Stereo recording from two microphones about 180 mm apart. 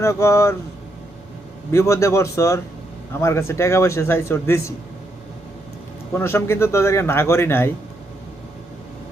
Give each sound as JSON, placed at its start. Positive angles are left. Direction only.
{"t": 0.0, "sound": "speech", "side_deg": 15}
{"t": 1.7, "sound": "speech", "side_deg": 15}
{"t": 6.1, "sound": "speech", "side_deg": 15}